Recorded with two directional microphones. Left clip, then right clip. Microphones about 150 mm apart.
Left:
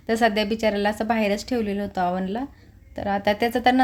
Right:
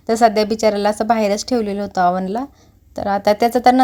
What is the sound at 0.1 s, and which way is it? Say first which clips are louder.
Speech: right 7 dB; 35° right (ahead or behind).